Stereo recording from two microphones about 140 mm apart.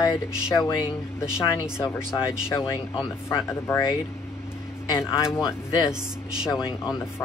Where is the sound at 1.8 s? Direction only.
20° left (ahead or behind).